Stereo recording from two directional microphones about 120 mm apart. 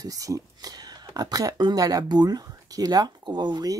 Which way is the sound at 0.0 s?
30° right (ahead or behind).